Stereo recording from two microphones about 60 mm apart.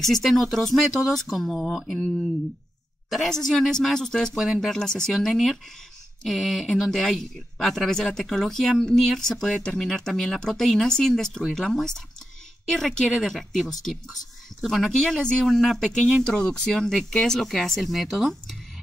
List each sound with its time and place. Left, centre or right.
0.0 s speech: centre
3.1 s speech: centre
15.4 s speech: centre
16.3 s speech: centre